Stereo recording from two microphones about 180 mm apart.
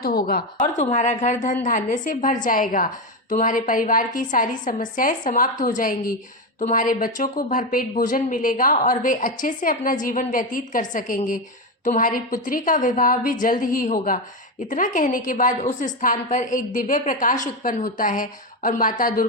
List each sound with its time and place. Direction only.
0.0 s a woman's voice: 60° left (ahead or behind)
0.8 s speech: 40° left (ahead or behind)